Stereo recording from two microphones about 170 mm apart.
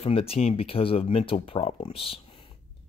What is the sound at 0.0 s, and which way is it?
Speech, 35° left (ahead or behind).